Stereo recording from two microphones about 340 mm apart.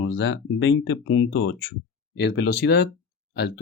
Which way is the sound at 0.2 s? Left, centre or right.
Left.